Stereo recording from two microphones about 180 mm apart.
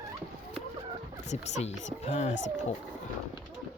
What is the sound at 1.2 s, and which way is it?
Speech, 40° left (ahead or behind).